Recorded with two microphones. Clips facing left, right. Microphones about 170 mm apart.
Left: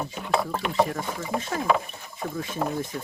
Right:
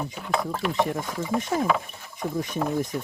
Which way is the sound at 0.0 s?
5° left (ahead or behind).